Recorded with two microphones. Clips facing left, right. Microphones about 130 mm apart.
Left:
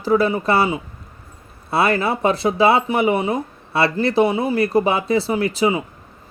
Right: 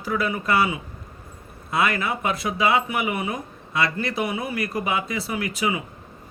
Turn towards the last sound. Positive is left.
turn(degrees=30)  # may be behind; listen again after turning